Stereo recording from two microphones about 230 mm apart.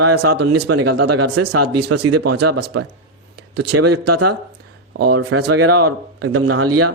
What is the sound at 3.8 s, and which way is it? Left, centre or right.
Speech, right.